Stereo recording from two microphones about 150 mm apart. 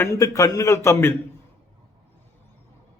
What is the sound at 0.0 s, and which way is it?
A man's voice, 20° left (ahead or behind).